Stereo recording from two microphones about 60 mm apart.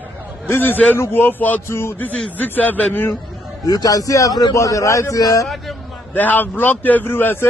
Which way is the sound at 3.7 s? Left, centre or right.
Left.